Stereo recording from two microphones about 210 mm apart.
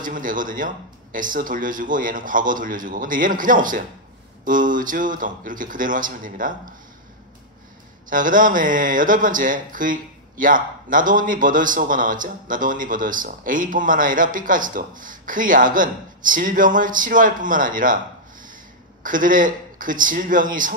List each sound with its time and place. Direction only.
0.0 s speech: 40° right (ahead or behind)
8.1 s speech: 40° right (ahead or behind)